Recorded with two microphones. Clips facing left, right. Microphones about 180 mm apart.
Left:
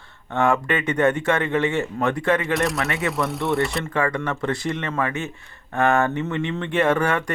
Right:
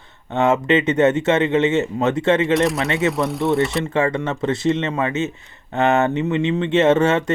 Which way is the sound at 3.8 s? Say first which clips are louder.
Right 4 dB; 25° right (ahead or behind).